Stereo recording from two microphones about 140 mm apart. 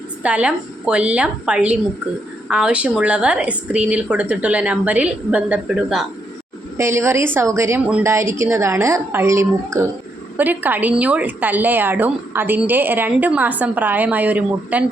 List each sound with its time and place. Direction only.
0.2 s a woman's voice: 10° right (ahead or behind)
6.7 s a woman's voice: 20° right (ahead or behind)